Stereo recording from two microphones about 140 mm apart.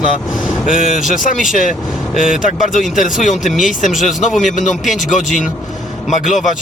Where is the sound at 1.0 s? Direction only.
65° left (ahead or behind).